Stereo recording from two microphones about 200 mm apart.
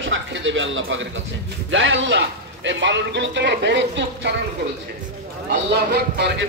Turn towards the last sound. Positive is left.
turn(degrees=-55)  # may be behind; listen again after turning